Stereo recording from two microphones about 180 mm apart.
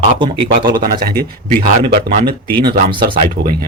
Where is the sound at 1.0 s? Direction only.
55° right (ahead or behind).